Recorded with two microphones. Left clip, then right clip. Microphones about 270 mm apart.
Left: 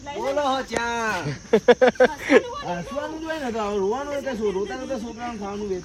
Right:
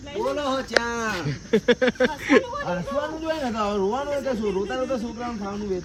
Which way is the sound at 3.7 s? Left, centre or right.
Centre.